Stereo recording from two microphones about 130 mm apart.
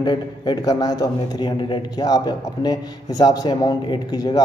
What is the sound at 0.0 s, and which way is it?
A man's voice, 35° left (ahead or behind).